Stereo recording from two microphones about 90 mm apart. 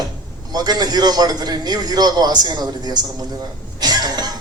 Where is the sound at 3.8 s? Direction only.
50° right (ahead or behind).